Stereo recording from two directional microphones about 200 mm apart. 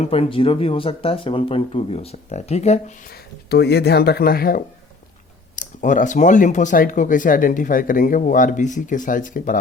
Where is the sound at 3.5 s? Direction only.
55° left (ahead or behind).